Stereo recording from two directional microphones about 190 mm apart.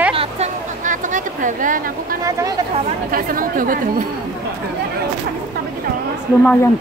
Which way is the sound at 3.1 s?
50° right (ahead or behind).